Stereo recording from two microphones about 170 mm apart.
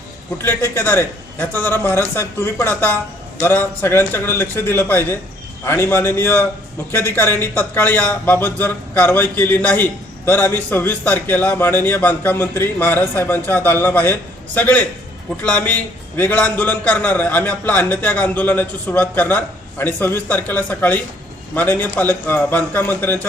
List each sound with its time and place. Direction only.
0.4 s speech: 10° left (ahead or behind)